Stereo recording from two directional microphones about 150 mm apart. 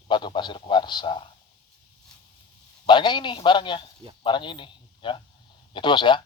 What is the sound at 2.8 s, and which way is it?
A man's voice, 30° left (ahead or behind).